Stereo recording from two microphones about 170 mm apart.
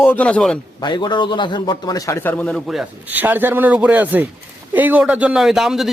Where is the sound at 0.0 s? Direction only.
10° left (ahead or behind).